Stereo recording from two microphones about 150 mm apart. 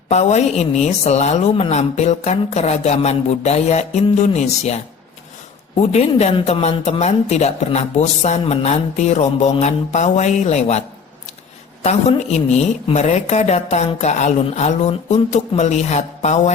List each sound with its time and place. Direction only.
0.1 s a man's voice: 50° left (ahead or behind)
5.9 s a man's voice: 45° left (ahead or behind)